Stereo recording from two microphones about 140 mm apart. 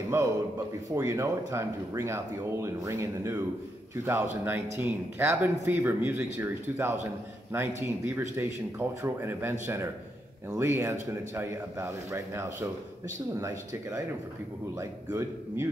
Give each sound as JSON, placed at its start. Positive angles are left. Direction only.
{"t": 0.1, "sound": "speech", "side_deg": -20}